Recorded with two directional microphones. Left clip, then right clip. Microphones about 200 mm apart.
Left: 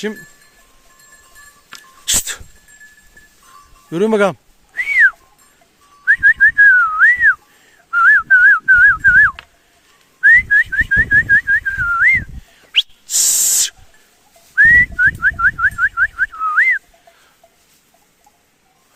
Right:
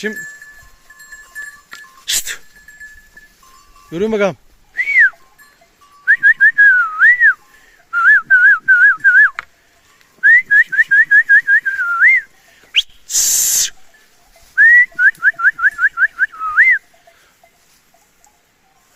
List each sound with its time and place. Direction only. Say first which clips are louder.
1.7 s music: left 1 dB; 20° left (ahead or behind)
3.9 s whistling: left 2 dB; 15° left (ahead or behind)
6.1 s whistling: right 1 dB; 10° left (ahead or behind)
12.7 s owl: even; 5° left (ahead or behind)
14.5 s car alarm: right 1 dB; 5° left (ahead or behind)